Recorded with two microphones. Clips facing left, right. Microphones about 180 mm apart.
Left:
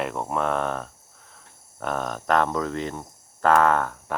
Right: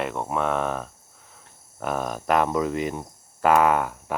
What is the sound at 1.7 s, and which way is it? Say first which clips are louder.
Cricket: right 1 dB; 5° right (ahead or behind).